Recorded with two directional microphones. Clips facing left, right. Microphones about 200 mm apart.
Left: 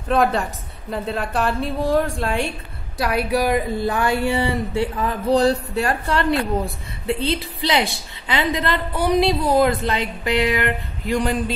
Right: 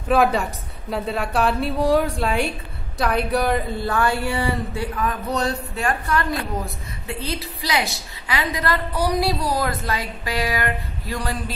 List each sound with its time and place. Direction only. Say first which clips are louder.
0.1 s a woman's voice: right 1 dB; 5° right (ahead or behind); by 11.5 s 20° left (ahead or behind)